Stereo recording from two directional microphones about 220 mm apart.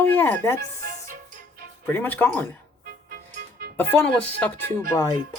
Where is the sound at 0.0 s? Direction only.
10° left (ahead or behind).